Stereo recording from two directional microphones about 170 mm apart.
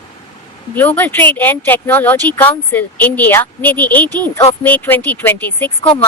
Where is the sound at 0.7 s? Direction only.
10° left (ahead or behind).